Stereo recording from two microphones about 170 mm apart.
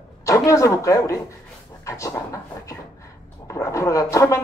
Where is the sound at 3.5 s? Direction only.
20° left (ahead or behind).